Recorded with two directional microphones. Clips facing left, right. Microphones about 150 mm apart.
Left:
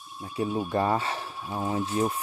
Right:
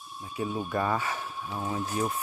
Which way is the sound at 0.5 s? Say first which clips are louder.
Left 4 dB; 20° left (ahead or behind).